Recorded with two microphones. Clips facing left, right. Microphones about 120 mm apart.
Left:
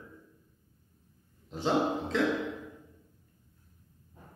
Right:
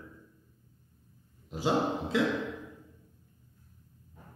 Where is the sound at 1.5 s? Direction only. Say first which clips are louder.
Even; 10° right (ahead or behind).